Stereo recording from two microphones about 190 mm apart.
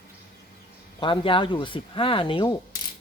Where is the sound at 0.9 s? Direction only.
25° left (ahead or behind).